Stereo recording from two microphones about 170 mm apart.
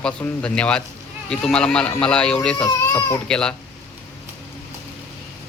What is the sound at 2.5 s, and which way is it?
Speech, 15° left (ahead or behind).